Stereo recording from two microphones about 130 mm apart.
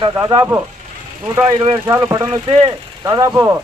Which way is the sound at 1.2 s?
20° right (ahead or behind).